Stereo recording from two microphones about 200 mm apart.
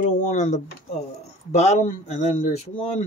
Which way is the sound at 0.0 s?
35° left (ahead or behind).